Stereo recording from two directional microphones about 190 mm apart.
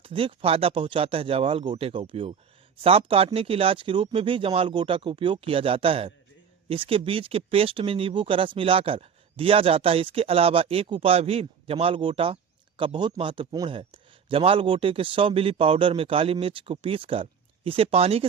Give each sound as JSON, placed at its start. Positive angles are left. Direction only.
{"t": 0.0, "sound": "speech", "side_deg": -30}